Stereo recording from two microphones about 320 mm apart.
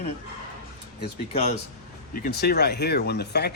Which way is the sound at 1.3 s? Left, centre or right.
Centre.